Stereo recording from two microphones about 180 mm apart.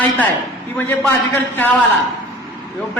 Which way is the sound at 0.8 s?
10° left (ahead or behind).